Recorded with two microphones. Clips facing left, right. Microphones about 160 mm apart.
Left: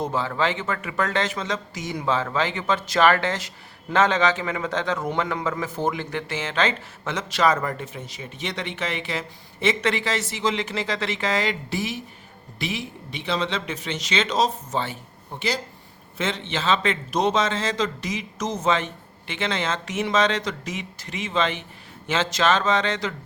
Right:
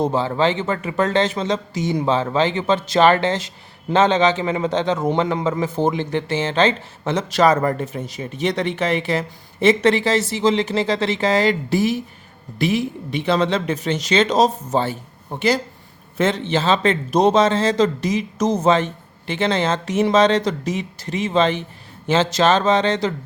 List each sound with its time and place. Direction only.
0.0 s a man's voice: 30° right (ahead or behind)